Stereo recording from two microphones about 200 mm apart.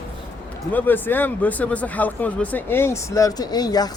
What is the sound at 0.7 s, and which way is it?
Speech, 10° left (ahead or behind).